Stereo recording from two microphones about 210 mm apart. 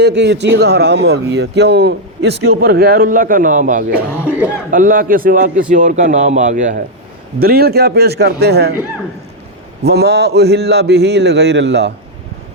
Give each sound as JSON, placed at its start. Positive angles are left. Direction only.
{"t": 0.0, "sound": "speech", "side_deg": -55}
{"t": 4.2, "sound": "speech", "side_deg": -5}
{"t": 4.7, "sound": "speech", "side_deg": -40}
{"t": 7.3, "sound": "speech", "side_deg": -45}
{"t": 9.8, "sound": "speech", "side_deg": -50}